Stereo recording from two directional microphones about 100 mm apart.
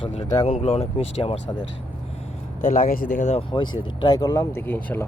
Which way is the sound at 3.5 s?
55° left (ahead or behind).